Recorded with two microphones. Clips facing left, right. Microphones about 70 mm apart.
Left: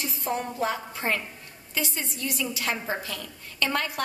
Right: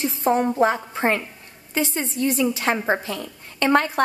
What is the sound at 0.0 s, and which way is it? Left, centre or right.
A woman's voice, right.